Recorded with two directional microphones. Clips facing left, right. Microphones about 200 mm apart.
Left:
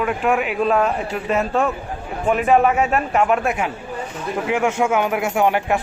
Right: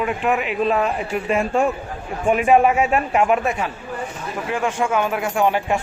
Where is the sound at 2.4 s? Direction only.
10° right (ahead or behind).